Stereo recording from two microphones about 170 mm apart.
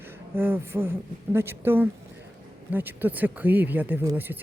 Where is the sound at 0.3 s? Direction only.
10° right (ahead or behind).